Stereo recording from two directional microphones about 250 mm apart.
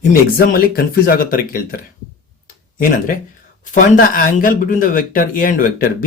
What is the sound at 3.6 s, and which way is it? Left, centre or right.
Speech, left.